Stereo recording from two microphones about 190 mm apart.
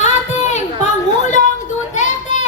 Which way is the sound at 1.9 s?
40° left (ahead or behind).